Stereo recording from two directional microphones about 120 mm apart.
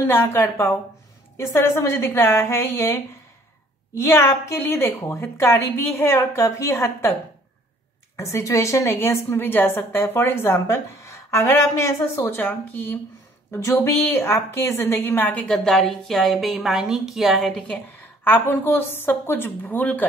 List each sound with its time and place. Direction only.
0.0 s a woman's voice: 20° left (ahead or behind)
8.2 s a woman's voice: 25° left (ahead or behind); by 17.7 s 5° left (ahead or behind)
18.2 s a woman's voice: 15° left (ahead or behind)